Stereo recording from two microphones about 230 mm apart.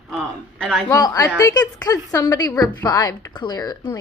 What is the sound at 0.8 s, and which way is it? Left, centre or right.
A woman's voice, centre.